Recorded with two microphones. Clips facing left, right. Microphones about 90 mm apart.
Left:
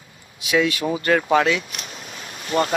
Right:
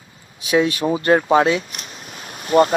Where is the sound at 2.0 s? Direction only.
35° right (ahead or behind).